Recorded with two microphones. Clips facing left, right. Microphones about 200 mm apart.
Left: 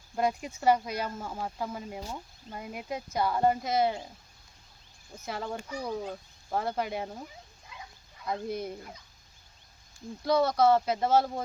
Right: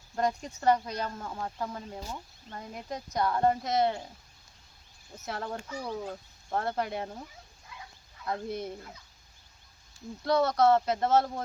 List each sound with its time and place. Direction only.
0.2 s speech: 10° left (ahead or behind)
5.1 s speech: centre (ahead or behind)
8.3 s speech: centre (ahead or behind)
10.2 s speech: centre (ahead or behind)